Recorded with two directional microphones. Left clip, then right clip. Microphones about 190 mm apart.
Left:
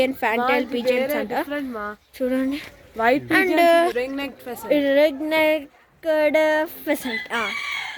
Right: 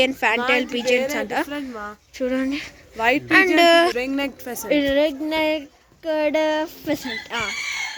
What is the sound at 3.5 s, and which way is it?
Speech, centre (ahead or behind).